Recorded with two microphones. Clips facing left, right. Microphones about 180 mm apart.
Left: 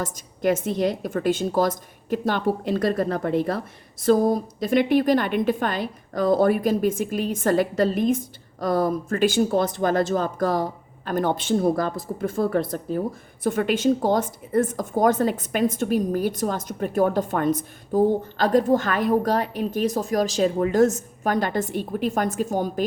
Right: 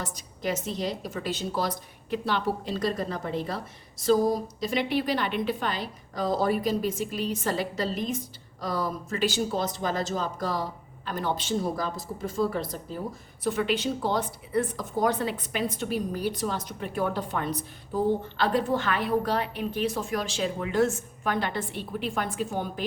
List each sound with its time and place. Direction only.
0.0 s speech: 50° left (ahead or behind)